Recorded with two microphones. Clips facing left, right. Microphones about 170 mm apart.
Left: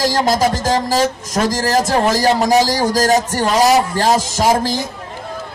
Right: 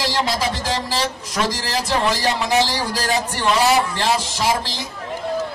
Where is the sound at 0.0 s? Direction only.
45° left (ahead or behind).